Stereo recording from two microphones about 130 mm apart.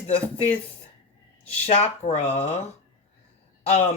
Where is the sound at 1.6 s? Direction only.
55° left (ahead or behind).